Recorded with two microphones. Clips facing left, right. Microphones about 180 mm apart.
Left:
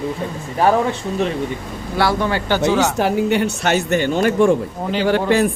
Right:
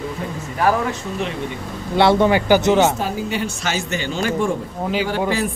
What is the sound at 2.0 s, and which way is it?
Speech, 25° right (ahead or behind).